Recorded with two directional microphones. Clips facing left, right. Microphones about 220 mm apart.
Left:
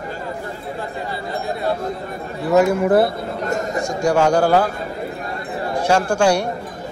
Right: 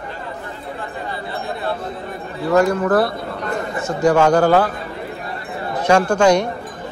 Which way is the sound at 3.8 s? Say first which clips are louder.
Right 3 dB; 10° left (ahead or behind).